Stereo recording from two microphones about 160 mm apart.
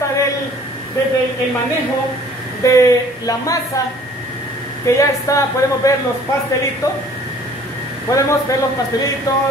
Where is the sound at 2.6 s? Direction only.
20° left (ahead or behind).